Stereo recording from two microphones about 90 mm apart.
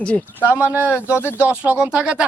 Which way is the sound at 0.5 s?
20° right (ahead or behind).